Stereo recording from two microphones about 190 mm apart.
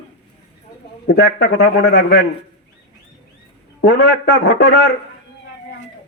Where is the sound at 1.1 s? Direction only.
60° left (ahead or behind).